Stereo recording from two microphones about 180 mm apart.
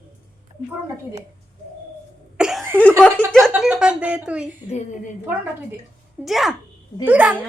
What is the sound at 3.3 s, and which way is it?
Speech, centre (ahead or behind).